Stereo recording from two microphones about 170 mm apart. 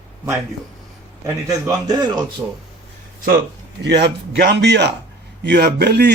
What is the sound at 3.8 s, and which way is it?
A man's voice, 90° right.